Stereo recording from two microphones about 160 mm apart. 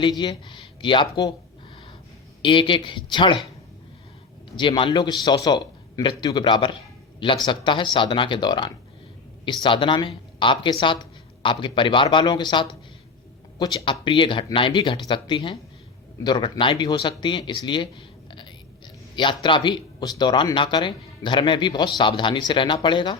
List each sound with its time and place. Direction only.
0.0 s speech: 25° left (ahead or behind)
2.4 s speech: 30° left (ahead or behind)
4.5 s speech: 30° left (ahead or behind)